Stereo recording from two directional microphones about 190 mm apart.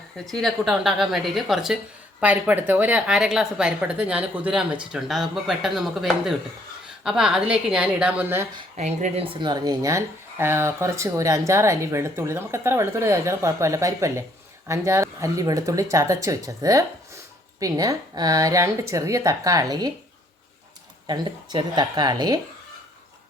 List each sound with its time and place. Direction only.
0.3 s a woman's voice: centre (ahead or behind)
8.7 s speech: 40° right (ahead or behind); by 19.9 s 20° right (ahead or behind)
21.1 s a woman's voice: 20° right (ahead or behind)